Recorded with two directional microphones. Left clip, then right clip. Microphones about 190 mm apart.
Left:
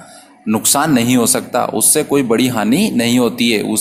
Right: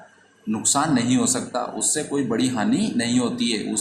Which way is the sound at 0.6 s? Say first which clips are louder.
Left 6 dB; 45° left (ahead or behind).